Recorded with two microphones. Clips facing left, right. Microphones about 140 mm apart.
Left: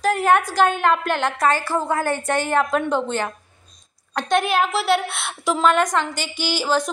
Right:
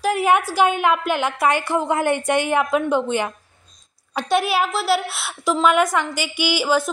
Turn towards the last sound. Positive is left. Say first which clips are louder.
# right 2 dB
turn(degrees=-10)  # may be behind; listen again after turning